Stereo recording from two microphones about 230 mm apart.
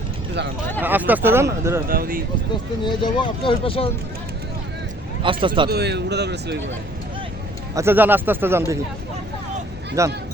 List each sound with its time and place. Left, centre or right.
0.8 s speech: centre
1.9 s speech: right
2.8 s speech: centre
5.2 s speech: right
5.7 s speech: right
7.8 s speech: centre
10.0 s speech: centre